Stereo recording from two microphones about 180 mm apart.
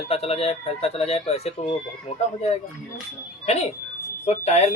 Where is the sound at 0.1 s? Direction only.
35° left (ahead or behind).